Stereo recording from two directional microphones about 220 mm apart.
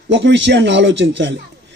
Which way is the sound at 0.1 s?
55° right (ahead or behind).